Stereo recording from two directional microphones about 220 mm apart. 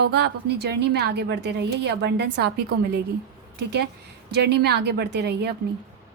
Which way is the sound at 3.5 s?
50° right (ahead or behind).